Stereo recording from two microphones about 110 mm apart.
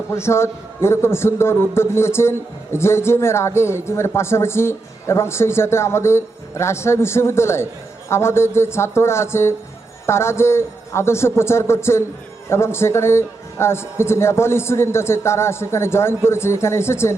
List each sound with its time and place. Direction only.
0.1 s speech: 25° left (ahead or behind)